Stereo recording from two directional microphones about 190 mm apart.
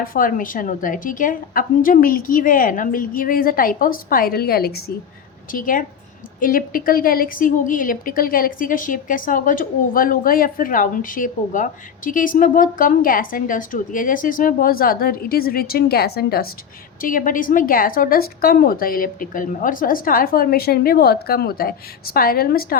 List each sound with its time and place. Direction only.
0.0 s a woman's voice: 45° left (ahead or behind)